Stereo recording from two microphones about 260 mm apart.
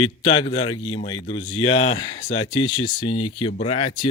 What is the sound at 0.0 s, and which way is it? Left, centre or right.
A man's voice, centre.